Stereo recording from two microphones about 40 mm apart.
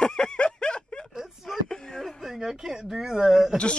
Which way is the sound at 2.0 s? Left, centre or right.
Centre.